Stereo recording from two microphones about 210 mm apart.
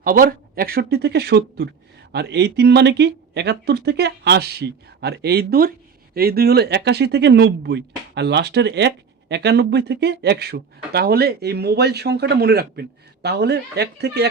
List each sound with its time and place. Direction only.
0.0 s speech: 40° right (ahead or behind)